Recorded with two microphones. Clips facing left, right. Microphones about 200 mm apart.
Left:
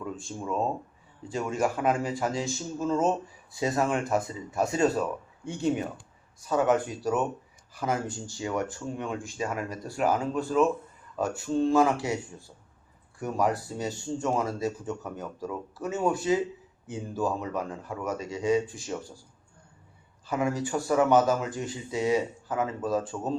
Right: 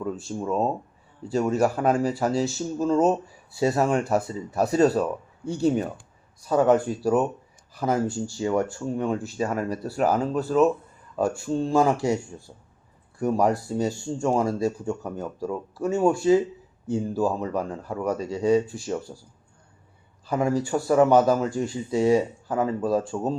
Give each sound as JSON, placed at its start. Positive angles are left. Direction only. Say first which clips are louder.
{"t": 0.0, "sound": "speech", "louder": "right 6 dB", "side_deg": -40}
{"t": 13.1, "sound": "speech", "louder": "right 5 dB", "side_deg": -35}
{"t": 20.2, "sound": "speech", "louder": "right 4 dB", "side_deg": -35}